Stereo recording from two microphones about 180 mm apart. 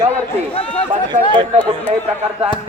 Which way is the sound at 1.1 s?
25° right (ahead or behind).